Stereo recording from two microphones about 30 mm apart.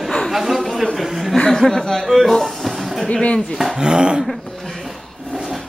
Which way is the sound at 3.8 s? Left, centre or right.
Right.